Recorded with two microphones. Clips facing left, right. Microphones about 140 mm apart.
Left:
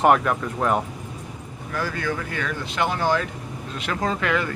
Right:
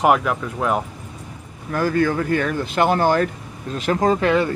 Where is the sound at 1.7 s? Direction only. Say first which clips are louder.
Right 8 dB; 45° right (ahead or behind).